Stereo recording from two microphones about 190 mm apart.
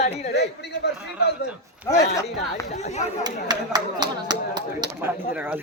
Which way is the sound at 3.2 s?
20° right (ahead or behind).